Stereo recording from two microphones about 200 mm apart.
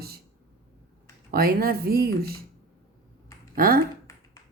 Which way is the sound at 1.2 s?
45° right (ahead or behind).